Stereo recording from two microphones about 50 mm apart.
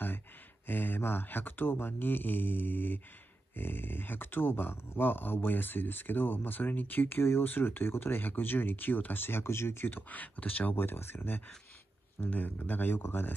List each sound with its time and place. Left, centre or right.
0.7 s speech: left
10.0 s speech: left
10.8 s speech: left
12.4 s speech: left